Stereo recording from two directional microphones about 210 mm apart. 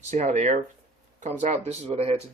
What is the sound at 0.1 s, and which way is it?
Speech, 35° right (ahead or behind).